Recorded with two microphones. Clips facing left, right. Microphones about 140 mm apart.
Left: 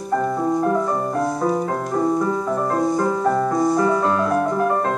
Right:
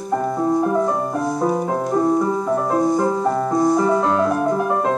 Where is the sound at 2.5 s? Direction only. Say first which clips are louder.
Right 3 dB; 10° right (ahead or behind).